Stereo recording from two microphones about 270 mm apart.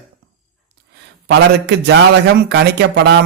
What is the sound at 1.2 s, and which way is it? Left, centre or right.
A man's voice, right.